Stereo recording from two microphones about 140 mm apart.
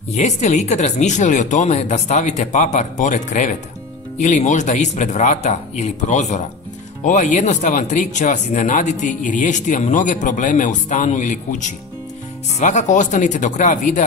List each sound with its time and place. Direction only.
0.1 s speech: 60° left (ahead or behind)